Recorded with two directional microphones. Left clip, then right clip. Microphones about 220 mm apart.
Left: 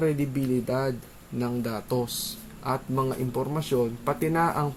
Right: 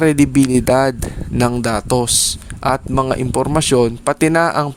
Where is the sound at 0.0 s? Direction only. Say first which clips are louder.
Right 13 dB; 50° right (ahead or behind).